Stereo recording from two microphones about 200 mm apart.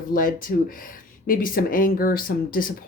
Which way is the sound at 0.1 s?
45° left (ahead or behind).